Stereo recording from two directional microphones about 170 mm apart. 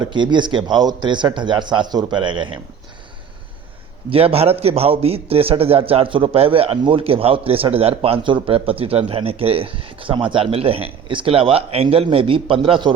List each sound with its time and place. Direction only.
0.0 s a man's voice: 25° right (ahead or behind)
4.1 s a man's voice: 35° right (ahead or behind)